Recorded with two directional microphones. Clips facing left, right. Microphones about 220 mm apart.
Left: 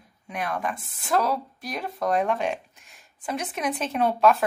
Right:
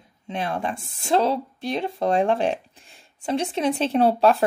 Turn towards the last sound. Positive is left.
turn(degrees=-30)  # may be behind; listen again after turning